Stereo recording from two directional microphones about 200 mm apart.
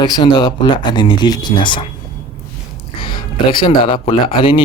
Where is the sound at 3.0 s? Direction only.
25° left (ahead or behind).